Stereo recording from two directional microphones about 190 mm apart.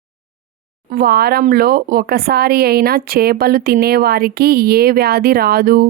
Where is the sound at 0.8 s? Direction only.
50° right (ahead or behind).